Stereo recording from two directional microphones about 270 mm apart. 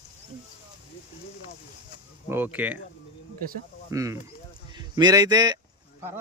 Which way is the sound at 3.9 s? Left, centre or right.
Centre.